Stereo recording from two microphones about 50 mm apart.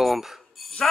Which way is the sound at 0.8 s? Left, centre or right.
Centre.